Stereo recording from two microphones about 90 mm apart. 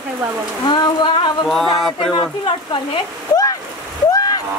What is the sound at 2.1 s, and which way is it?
Speech, 65° left (ahead or behind).